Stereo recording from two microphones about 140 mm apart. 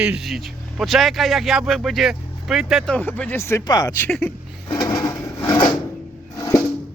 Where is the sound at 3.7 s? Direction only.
30° left (ahead or behind).